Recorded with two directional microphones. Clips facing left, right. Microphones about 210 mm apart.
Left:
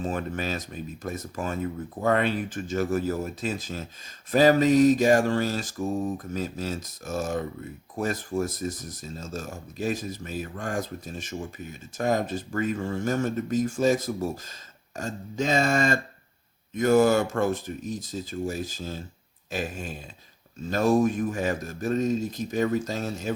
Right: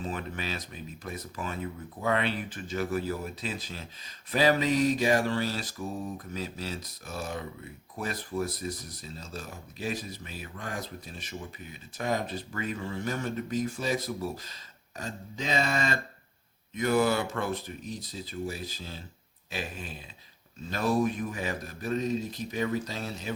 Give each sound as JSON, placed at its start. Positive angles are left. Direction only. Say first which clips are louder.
{"t": 0.0, "sound": "speech", "louder": "left 6 dB", "side_deg": 45}